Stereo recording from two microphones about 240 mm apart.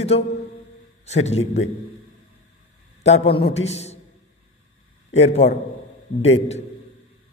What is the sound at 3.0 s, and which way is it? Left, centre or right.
Speech, left.